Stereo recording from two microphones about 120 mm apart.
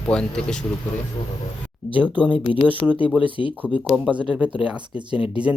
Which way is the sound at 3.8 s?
Centre (ahead or behind).